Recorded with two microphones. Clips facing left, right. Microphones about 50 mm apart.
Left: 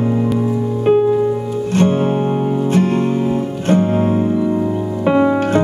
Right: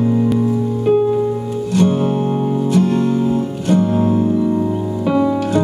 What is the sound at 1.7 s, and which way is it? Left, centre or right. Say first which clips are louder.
Music: even; left.